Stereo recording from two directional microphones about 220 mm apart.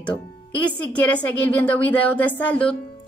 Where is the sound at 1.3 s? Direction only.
5° left (ahead or behind).